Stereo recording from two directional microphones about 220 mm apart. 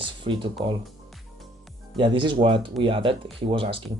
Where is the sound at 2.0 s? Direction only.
20° right (ahead or behind).